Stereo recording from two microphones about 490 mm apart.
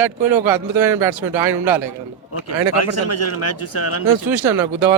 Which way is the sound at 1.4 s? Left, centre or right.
Right.